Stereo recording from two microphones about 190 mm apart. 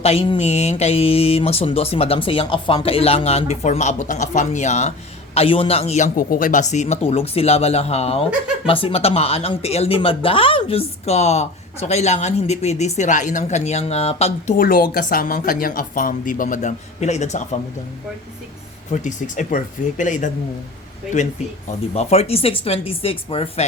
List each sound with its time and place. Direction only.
0.0 s speech: 30° left (ahead or behind)
14.5 s speech: 50° left (ahead or behind)
18.9 s speech: 40° left (ahead or behind)
21.9 s speech: 35° left (ahead or behind)